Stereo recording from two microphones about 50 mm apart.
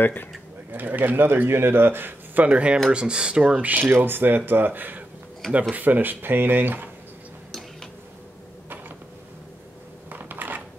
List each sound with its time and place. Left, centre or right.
0.0 s speech: left
0.7 s speech: right
2.4 s speech: right
4.0 s speech: right
10.1 s a sound: right